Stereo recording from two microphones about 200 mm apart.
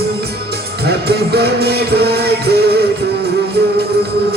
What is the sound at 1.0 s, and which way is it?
Music, 55° right (ahead or behind).